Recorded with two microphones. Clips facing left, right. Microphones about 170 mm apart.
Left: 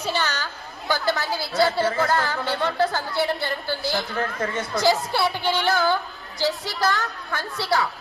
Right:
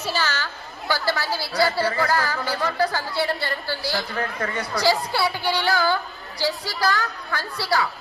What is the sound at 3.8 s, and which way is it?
Speech, 20° left (ahead or behind).